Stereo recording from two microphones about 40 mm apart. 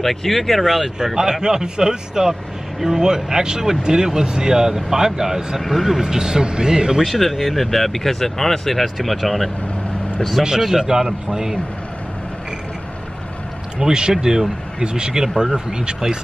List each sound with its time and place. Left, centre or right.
0.0 s speech: centre
0.9 s speech: centre
5.6 s speech: centre
7.0 s speech: centre
10.6 s speech: centre
13.7 s speech: centre